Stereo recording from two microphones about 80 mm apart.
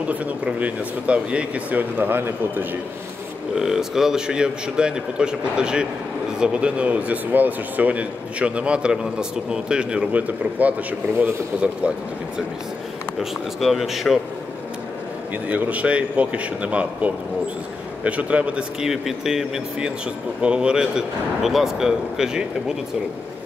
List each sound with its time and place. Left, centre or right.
0.1 s speech: centre
3.5 s speech: centre
13.2 s speech: centre
15.4 s speech: centre